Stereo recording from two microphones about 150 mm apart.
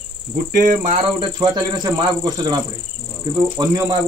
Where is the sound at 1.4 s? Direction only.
30° right (ahead or behind).